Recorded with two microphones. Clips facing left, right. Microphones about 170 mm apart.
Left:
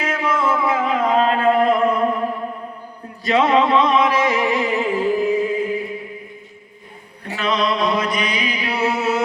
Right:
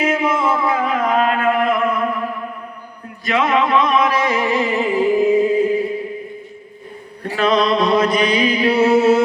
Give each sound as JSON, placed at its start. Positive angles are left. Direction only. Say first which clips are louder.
{"t": 0.0, "sound": "a sound", "louder": "right 3 dB", "side_deg": -25}
{"t": 0.6, "sound": "music", "louder": "right 1 dB", "side_deg": 20}
{"t": 4.5, "sound": "music", "louder": "right 2 dB", "side_deg": -5}
{"t": 7.3, "sound": "music", "louder": "right 5 dB", "side_deg": -40}